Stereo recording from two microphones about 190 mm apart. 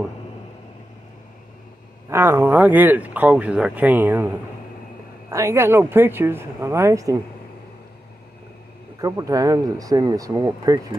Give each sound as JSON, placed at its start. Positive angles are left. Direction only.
{"t": 2.0, "sound": "speech", "side_deg": -15}
{"t": 5.3, "sound": "speech", "side_deg": -15}
{"t": 9.0, "sound": "speech", "side_deg": -20}